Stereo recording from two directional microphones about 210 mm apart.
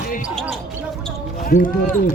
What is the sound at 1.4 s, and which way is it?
Speech, 40° left (ahead or behind).